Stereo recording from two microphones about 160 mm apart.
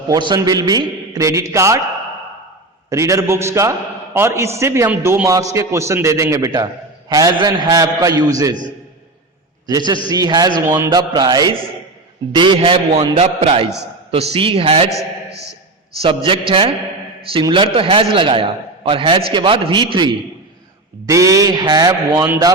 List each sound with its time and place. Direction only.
0.1 s a man's voice: 25° right (ahead or behind)
2.9 s a man's voice: 20° right (ahead or behind)
9.6 s a man's voice: 25° right (ahead or behind)
16.0 s a man's voice: 35° right (ahead or behind)
21.1 s a man's voice: 20° right (ahead or behind)